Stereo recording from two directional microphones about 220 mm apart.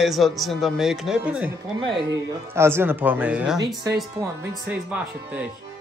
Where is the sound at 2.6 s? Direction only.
10° right (ahead or behind).